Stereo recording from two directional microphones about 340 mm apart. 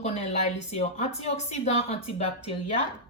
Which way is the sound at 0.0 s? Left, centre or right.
Centre.